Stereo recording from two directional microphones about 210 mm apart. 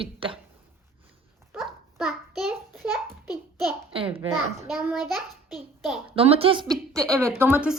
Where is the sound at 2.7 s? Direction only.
5° right (ahead or behind).